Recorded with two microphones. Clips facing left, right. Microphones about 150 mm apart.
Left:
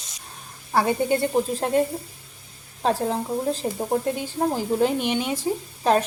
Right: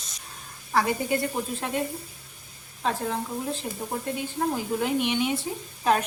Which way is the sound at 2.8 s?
35° left (ahead or behind).